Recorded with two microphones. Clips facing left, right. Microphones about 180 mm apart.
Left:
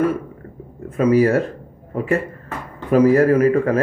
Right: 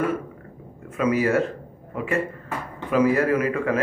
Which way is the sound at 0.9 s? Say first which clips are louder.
Left 6 dB; 40° left (ahead or behind).